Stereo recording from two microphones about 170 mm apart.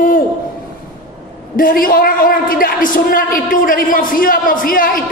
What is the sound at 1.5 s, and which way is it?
Speech, 55° left (ahead or behind).